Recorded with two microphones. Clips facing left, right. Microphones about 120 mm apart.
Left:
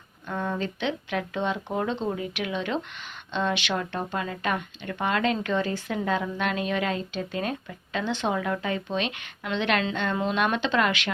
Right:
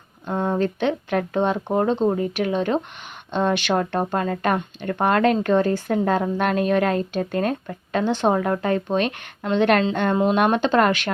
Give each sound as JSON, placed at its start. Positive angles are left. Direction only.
{"t": 0.3, "sound": "speech", "side_deg": -45}